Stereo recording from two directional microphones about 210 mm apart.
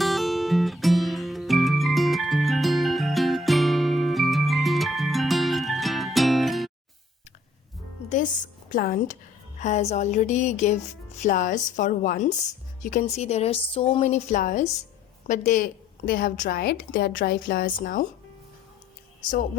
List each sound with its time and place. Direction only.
0.0 s music: centre (ahead or behind)
8.7 s a woman's voice: 40° left (ahead or behind)